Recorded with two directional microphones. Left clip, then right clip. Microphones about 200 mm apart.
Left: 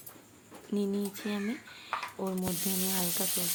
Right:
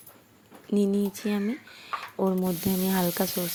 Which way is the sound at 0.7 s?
35° right (ahead or behind).